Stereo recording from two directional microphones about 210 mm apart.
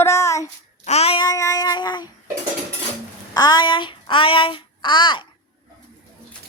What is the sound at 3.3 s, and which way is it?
Child singing, 20° left (ahead or behind).